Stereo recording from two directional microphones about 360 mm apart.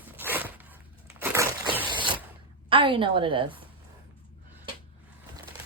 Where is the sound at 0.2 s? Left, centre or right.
Centre.